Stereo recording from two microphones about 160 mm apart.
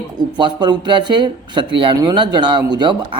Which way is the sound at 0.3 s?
25° right (ahead or behind).